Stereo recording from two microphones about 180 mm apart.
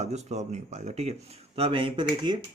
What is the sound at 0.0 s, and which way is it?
Speech, 40° right (ahead or behind).